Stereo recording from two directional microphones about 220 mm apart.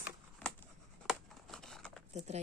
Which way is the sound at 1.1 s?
Centre (ahead or behind).